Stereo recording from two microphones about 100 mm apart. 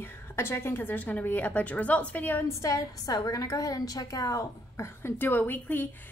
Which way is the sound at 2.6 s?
35° left (ahead or behind).